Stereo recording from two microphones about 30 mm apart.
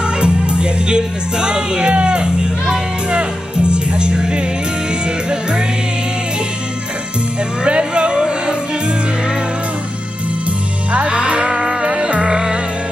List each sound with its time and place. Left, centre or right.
0.0 s music: right
7.6 s music: right
10.9 s music: right
11.5 s music: right
11.9 s music: right